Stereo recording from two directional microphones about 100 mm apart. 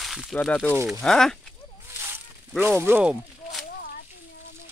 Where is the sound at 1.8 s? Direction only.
25° right (ahead or behind).